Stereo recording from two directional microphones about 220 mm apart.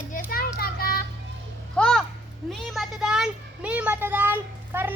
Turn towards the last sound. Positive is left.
turn(degrees=-10)  # may be behind; listen again after turning